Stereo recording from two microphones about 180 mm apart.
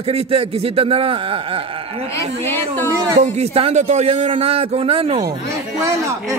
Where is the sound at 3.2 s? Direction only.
35° right (ahead or behind).